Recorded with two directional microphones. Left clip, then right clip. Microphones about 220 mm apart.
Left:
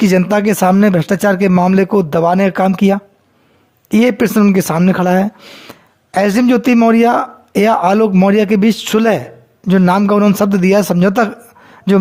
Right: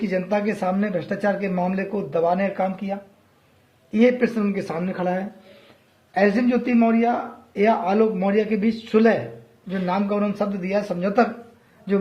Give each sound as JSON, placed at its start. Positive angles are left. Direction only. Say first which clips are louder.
{"t": 0.0, "sound": "a man's voice", "louder": "left 10 dB", "side_deg": 55}